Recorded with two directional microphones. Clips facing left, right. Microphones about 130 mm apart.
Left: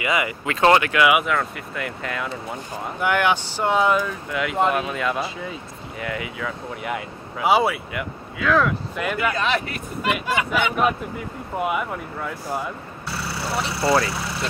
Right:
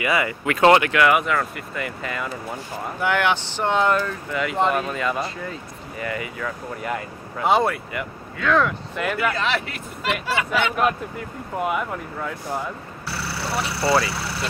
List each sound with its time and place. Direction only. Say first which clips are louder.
0.0 s speech: right 1 dB; 20° left (ahead or behind)
0.6 s speech: right 1 dB; 25° right (ahead or behind)
0.9 s speech: even; 5° left (ahead or behind)
3.0 s speech: left 1 dB; 15° left (ahead or behind)
9.3 s speech: left 1 dB; 20° left (ahead or behind)
11.5 s speech: even; 5° left (ahead or behind)